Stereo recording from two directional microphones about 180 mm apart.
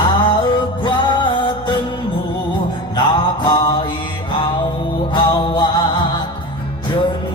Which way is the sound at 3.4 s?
25° left (ahead or behind).